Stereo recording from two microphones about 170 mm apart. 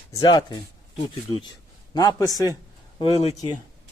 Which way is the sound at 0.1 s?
25° left (ahead or behind).